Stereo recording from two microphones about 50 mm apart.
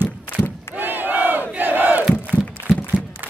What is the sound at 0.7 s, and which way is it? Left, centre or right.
Crowd, right.